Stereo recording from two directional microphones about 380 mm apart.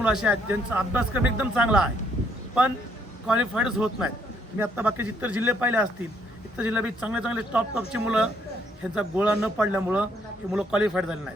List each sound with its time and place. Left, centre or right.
0.0 s speech: centre
3.2 s speech: centre